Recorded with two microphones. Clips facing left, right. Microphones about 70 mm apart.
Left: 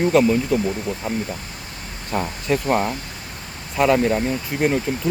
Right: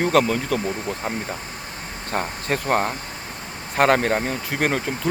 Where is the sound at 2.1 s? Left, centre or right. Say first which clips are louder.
Left 3 dB; right.